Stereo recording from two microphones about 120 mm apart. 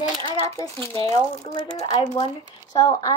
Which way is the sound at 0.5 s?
25° left (ahead or behind).